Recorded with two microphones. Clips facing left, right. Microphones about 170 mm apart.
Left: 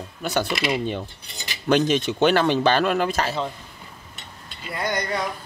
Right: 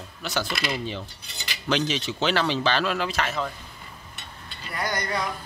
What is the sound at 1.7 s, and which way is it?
A man's voice, 50° left (ahead or behind).